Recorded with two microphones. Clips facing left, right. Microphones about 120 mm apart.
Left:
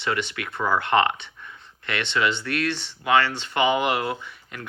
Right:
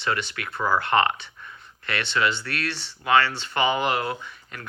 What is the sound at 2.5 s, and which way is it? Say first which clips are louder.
Speech: left 5 dB; 20° left (ahead or behind).